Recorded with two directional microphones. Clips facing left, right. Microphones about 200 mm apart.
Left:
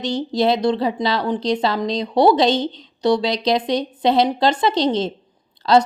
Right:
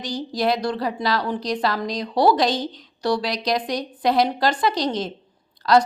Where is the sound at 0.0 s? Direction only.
25° left (ahead or behind).